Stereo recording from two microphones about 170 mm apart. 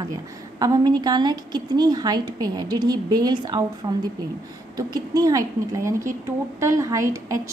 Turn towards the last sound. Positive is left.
turn(degrees=-20)  # may be behind; listen again after turning